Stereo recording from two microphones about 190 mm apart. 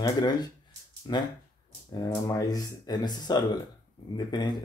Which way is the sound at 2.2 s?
20° left (ahead or behind).